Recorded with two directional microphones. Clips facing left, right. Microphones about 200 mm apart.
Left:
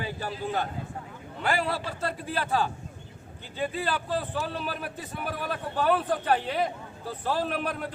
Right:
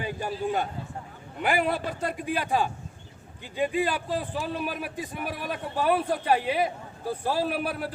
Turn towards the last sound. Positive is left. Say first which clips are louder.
# right 2 dB
turn(degrees=-5)  # may be behind; listen again after turning